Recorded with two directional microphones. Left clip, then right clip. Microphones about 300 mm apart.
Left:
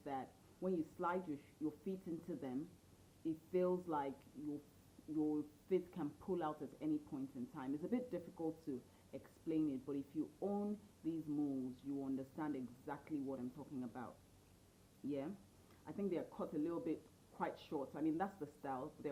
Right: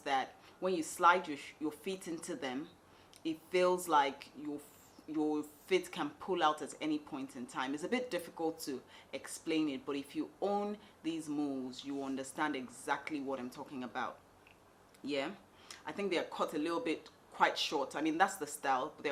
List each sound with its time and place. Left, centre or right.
0.0 s speech: centre
11.3 s speech: right